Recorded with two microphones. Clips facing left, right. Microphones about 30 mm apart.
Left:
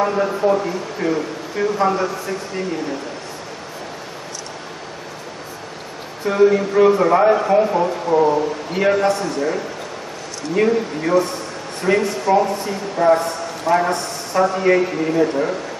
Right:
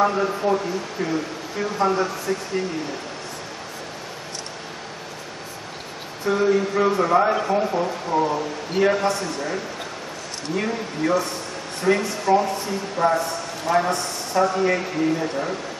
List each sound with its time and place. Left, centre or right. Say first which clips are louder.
0.0 s a man's voice: left 3 dB; centre
6.2 s a man's voice: left 5 dB; centre